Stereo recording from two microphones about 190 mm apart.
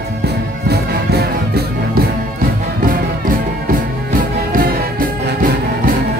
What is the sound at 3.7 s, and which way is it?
Music, 50° right (ahead or behind).